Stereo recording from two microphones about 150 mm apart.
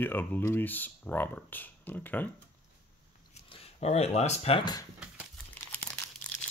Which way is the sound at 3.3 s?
45° left (ahead or behind).